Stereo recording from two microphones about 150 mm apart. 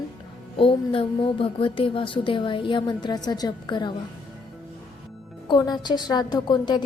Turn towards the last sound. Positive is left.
turn(degrees=30)  # may be behind; listen again after turning